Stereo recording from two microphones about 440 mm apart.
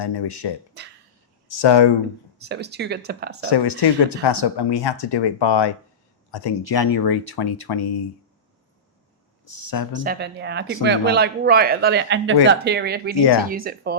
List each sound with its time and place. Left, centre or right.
0.0 s speech: left
1.6 s speech: left
2.4 s speech: right
3.4 s speech: left
9.4 s speech: left
10.0 s speech: right
13.1 s speech: left
13.5 s speech: centre